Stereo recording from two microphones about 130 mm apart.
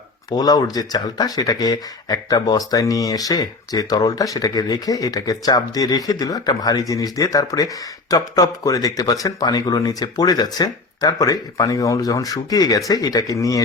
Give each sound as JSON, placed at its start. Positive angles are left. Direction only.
{"t": 0.3, "sound": "speech", "side_deg": 30}